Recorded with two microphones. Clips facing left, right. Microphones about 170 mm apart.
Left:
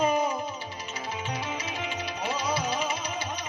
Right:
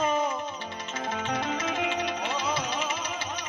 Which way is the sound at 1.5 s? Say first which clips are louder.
Right 5 dB; 70° right (ahead or behind).